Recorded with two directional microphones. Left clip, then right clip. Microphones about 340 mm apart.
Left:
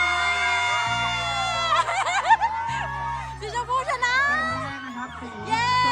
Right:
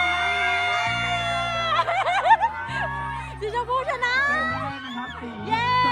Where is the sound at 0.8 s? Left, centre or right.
Centre.